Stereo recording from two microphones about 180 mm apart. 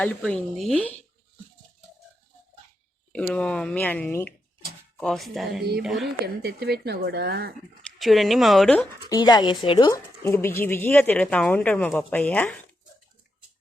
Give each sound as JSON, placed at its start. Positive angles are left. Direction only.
{"t": 0.0, "sound": "speech", "side_deg": 5}
{"t": 3.1, "sound": "speech", "side_deg": 5}
{"t": 6.2, "sound": "speech", "side_deg": -60}
{"t": 7.8, "sound": "speech", "side_deg": 0}
{"t": 9.0, "sound": "speech", "side_deg": 25}